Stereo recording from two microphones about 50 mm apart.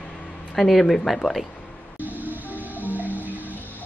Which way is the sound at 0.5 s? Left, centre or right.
Centre.